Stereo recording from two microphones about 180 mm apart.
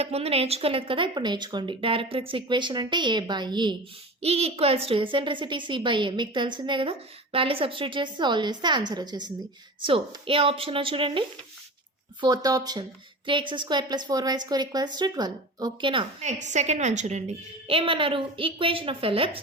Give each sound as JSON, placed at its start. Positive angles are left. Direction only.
{"t": 0.0, "sound": "a woman's voice", "side_deg": -35}
{"t": 16.4, "sound": "a woman's voice", "side_deg": -40}
{"t": 17.7, "sound": "a woman's voice", "side_deg": -30}